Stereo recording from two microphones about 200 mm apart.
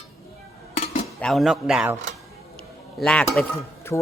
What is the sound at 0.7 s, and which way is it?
Dishes, 30° left (ahead or behind).